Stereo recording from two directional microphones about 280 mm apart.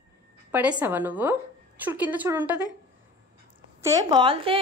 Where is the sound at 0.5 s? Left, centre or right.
Centre.